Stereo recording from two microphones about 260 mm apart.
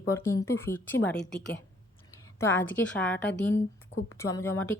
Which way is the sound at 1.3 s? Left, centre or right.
Left.